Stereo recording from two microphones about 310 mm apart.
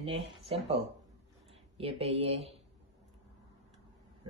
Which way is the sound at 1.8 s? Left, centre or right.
Centre.